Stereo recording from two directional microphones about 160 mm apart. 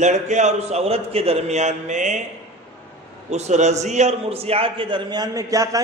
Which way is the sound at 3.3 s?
45° right (ahead or behind).